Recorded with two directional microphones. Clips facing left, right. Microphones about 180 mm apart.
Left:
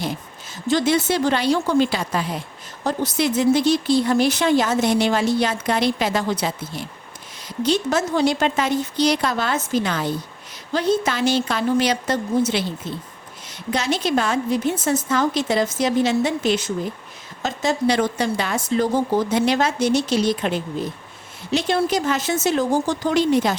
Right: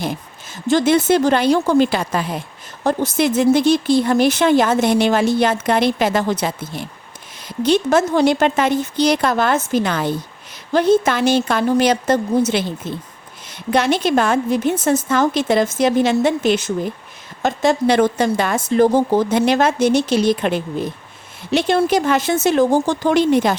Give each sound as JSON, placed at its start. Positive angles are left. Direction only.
{"t": 0.7, "sound": "a woman's voice", "side_deg": -50}